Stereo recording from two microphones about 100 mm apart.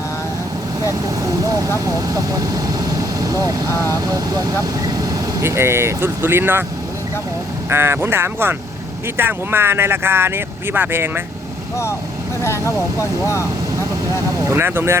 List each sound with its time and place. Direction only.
2.1 s speech: 35° right (ahead or behind)
5.4 s speech: 25° right (ahead or behind)
7.7 s speech: 25° right (ahead or behind)
12.4 s speech: 30° left (ahead or behind)
14.4 s speech: 25° right (ahead or behind)